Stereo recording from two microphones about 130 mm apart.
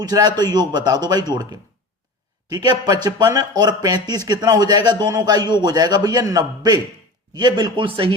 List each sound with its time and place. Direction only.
0.0 s a man's voice: 30° right (ahead or behind)